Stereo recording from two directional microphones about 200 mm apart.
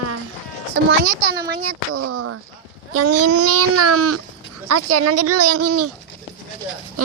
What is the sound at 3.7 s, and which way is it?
A child's voice, 90° right.